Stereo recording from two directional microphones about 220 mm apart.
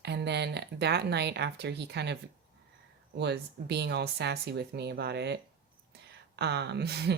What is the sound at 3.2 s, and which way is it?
A woman's voice, 50° right (ahead or behind).